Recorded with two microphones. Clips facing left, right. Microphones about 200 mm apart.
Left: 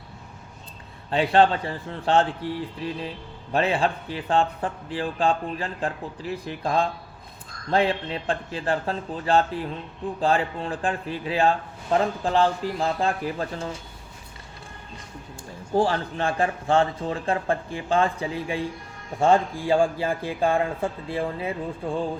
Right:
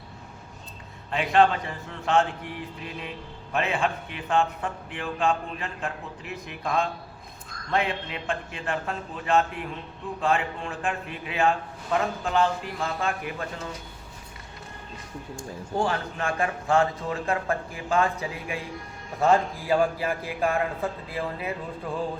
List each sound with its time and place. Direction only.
1.1 s a man's voice: 30° left (ahead or behind)
15.7 s a man's voice: 30° left (ahead or behind)